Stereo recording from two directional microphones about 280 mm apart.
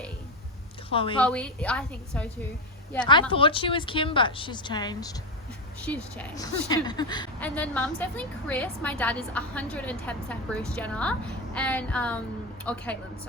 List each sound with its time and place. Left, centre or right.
0.9 s a woman's voice: centre
1.2 s a woman's voice: centre
3.1 s a woman's voice: centre